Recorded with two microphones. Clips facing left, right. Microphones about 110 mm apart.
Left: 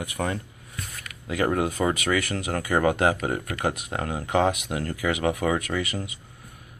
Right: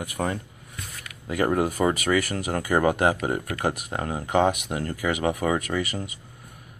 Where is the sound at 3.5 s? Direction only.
5° right (ahead or behind).